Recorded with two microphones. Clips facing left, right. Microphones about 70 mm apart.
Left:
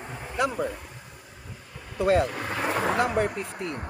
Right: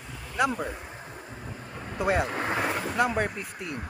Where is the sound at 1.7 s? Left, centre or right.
Right.